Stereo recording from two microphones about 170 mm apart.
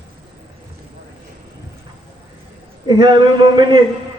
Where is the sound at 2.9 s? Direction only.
25° right (ahead or behind).